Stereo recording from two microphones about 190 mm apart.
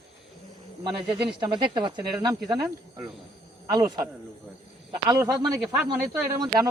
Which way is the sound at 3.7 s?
20° right (ahead or behind).